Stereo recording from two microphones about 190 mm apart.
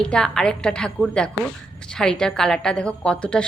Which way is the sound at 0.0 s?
5° left (ahead or behind).